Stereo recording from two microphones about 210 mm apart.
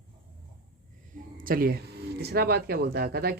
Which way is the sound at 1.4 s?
45° right (ahead or behind).